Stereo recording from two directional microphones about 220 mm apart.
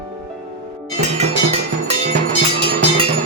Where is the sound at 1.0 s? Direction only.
30° right (ahead or behind).